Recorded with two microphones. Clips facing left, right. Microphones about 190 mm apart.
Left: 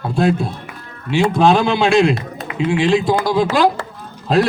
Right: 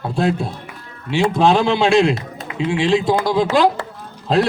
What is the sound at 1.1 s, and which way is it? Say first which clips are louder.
A man's voice: left 2 dB; 25° right (ahead or behind).